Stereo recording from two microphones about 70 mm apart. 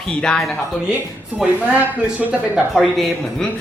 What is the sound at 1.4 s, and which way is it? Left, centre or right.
Speech, centre.